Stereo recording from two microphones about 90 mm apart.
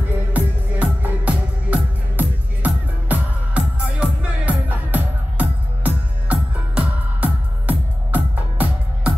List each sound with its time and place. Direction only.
0.3 s music: 15° right (ahead or behind)